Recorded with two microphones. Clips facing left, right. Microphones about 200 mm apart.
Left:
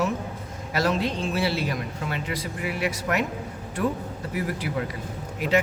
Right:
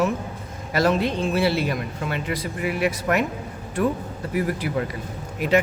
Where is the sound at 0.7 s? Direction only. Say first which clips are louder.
Right 4 dB; 55° right (ahead or behind).